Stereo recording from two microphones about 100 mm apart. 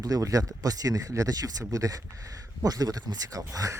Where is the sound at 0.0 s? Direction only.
35° right (ahead or behind).